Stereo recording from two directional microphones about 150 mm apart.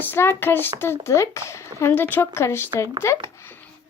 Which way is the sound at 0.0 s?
15° left (ahead or behind).